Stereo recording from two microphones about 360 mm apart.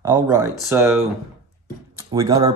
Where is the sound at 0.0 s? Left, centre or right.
Centre.